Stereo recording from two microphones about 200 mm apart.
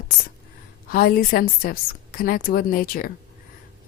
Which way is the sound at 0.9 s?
45° left (ahead or behind).